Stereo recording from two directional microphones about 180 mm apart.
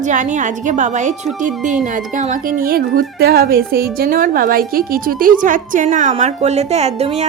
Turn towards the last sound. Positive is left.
turn(degrees=-35)  # may be behind; listen again after turning